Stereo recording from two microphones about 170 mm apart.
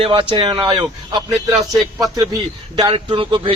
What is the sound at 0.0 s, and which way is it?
A man's voice, 30° right (ahead or behind).